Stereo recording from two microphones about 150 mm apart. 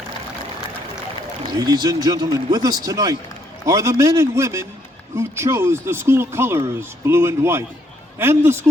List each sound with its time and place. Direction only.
1.5 s a man's voice: 25° right (ahead or behind)